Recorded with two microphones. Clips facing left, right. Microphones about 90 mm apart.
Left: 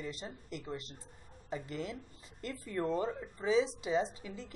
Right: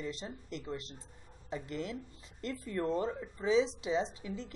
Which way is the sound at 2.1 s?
5° left (ahead or behind).